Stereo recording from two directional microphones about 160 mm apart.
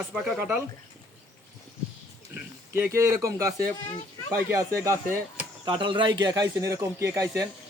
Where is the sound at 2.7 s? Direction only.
15° right (ahead or behind).